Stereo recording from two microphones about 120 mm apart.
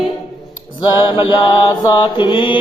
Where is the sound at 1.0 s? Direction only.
45° left (ahead or behind).